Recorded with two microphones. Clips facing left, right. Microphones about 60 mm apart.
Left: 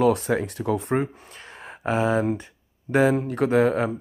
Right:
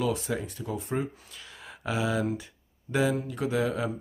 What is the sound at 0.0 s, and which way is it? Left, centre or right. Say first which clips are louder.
Speech: left 9 dB; left.